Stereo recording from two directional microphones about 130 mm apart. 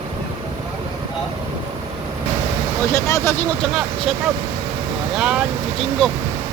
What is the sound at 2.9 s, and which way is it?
Speech, 25° left (ahead or behind).